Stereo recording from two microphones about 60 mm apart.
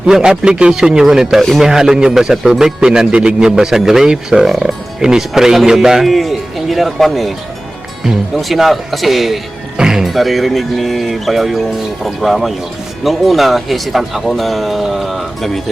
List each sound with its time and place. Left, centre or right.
0.0 s a man's voice: centre